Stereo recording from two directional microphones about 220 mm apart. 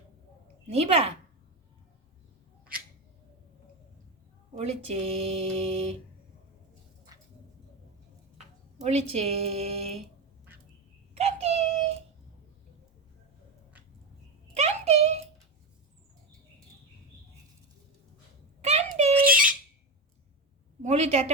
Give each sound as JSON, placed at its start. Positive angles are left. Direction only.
{"t": 0.7, "sound": "speech", "side_deg": -30}
{"t": 4.5, "sound": "speech", "side_deg": -30}
{"t": 8.8, "sound": "speech", "side_deg": -30}
{"t": 11.1, "sound": "synthetic singing", "side_deg": -30}
{"t": 14.5, "sound": "a sound", "side_deg": -30}
{"t": 18.6, "sound": "a sound", "side_deg": -30}
{"t": 20.8, "sound": "a woman's voice", "side_deg": -30}